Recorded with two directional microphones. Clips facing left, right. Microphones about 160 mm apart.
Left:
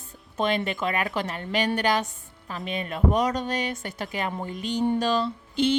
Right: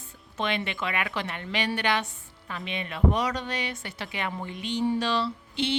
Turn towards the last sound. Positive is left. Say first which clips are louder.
# left 5 dB
turn(degrees=45)  # may be behind; listen again after turning